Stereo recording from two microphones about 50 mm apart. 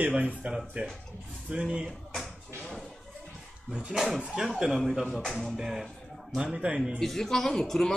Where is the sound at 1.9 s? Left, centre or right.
Centre.